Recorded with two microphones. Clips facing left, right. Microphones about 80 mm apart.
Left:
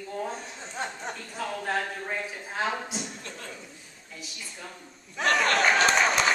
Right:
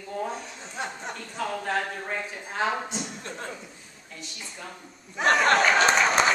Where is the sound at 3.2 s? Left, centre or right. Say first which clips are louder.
Right 4 dB; right.